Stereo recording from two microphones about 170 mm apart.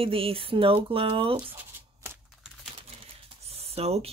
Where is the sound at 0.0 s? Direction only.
35° right (ahead or behind).